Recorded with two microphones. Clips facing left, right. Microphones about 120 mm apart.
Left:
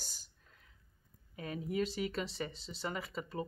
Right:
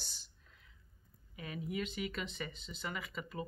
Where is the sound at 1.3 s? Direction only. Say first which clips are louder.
Left 4 dB; 40° left (ahead or behind).